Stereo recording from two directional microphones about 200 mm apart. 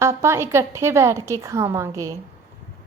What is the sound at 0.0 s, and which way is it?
A woman's voice, 15° right (ahead or behind).